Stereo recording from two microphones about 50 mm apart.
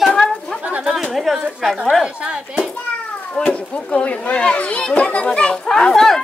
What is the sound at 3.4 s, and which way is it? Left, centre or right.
A child's voice, centre.